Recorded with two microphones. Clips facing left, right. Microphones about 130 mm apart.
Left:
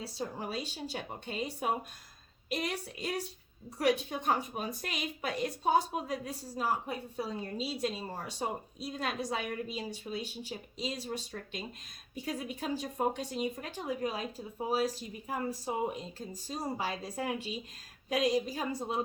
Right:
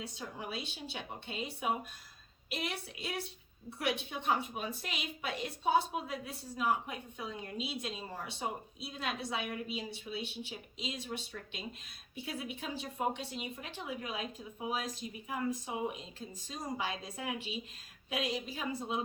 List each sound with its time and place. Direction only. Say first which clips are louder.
0.0 s a woman's voice: left 5 dB; 35° left (ahead or behind)